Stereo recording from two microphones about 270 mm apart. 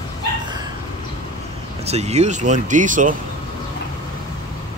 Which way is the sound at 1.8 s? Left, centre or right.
Right.